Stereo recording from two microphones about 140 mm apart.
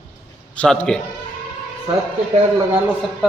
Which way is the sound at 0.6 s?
5° left (ahead or behind).